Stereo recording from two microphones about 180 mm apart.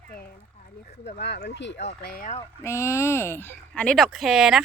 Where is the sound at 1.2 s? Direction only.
65° left (ahead or behind).